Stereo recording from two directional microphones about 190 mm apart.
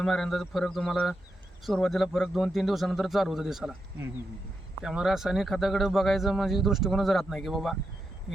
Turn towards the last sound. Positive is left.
turn(degrees=0)  # may be behind; listen again after turning